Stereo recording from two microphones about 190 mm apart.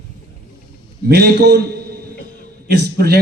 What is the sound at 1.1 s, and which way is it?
Speech, 60° right (ahead or behind).